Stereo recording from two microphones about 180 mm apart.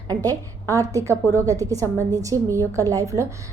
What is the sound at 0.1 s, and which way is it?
A woman's voice, 20° right (ahead or behind).